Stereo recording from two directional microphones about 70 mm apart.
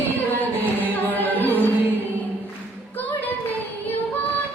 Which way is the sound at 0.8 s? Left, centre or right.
Left.